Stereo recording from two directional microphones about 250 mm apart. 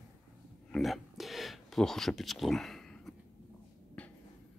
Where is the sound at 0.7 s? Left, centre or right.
Centre.